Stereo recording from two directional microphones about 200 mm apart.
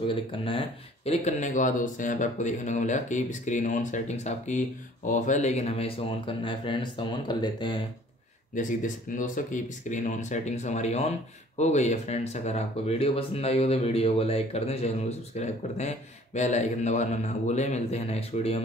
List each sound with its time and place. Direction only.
0.0 s speech: 25° left (ahead or behind)
8.5 s speech: 40° left (ahead or behind)